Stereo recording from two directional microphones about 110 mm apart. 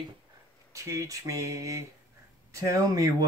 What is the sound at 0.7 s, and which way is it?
Speech, 30° right (ahead or behind).